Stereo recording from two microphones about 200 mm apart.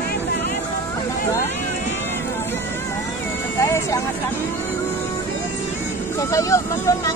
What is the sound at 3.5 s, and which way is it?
Vehicle, 15° left (ahead or behind).